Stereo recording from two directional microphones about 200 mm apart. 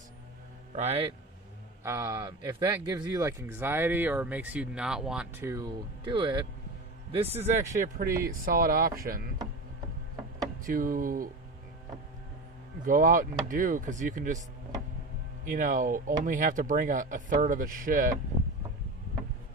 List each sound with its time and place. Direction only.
0.8 s speech: 30° right (ahead or behind)
1.8 s speech: 15° right (ahead or behind)
6.1 s speech: 25° right (ahead or behind); by 9.2 s 45° right (ahead or behind)
10.7 s speech: 45° right (ahead or behind)
12.8 s speech: 40° right (ahead or behind)
15.4 s speech: 40° right (ahead or behind)